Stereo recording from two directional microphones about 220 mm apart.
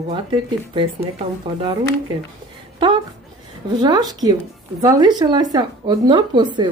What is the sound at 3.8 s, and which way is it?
A woman's voice, 20° right (ahead or behind).